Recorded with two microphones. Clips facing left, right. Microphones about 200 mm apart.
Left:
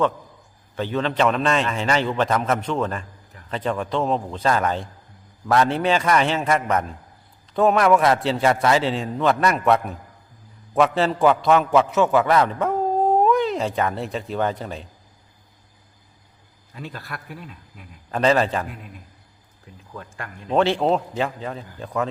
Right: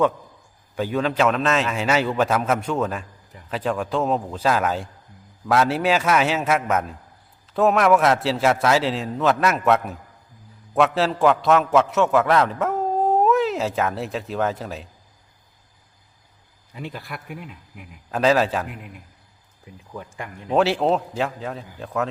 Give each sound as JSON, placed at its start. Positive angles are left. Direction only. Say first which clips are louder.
{"t": 0.8, "sound": "a man's voice", "louder": "right 1 dB", "side_deg": -10}
{"t": 16.7, "sound": "a man's voice", "louder": "right 1 dB", "side_deg": -15}
{"t": 18.1, "sound": "a man's voice", "louder": "even", "side_deg": 0}
{"t": 19.6, "sound": "a man's voice", "louder": "right 2 dB", "side_deg": -15}